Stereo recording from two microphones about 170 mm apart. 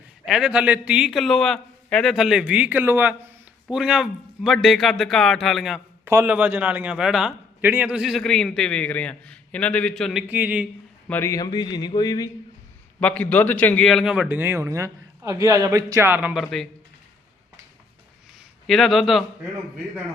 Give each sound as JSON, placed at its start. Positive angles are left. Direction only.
{"t": 0.3, "sound": "a man's voice", "side_deg": -5}
{"t": 6.1, "sound": "a man's voice", "side_deg": -10}
{"t": 10.2, "sound": "a man's voice", "side_deg": -10}
{"t": 11.1, "sound": "speech", "side_deg": 15}
{"t": 13.0, "sound": "a man's voice", "side_deg": 5}
{"t": 18.7, "sound": "a man's voice", "side_deg": 0}